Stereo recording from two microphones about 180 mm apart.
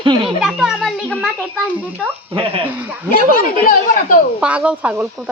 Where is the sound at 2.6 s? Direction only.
10° right (ahead or behind).